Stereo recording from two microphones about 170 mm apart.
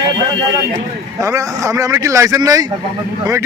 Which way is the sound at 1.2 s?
20° right (ahead or behind).